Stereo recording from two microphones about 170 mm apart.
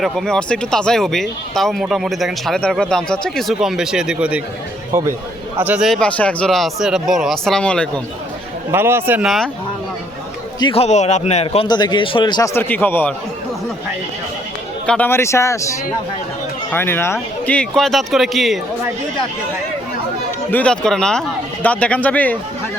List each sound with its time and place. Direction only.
0.0 s speech: centre (ahead or behind)
8.7 s a man's voice: 15° right (ahead or behind)
9.2 s speech: centre (ahead or behind)
10.6 s a man's voice: 35° left (ahead or behind)
12.5 s speech: 10° left (ahead or behind)
14.8 s speech: 10° left (ahead or behind)
20.5 s speech: 5° left (ahead or behind)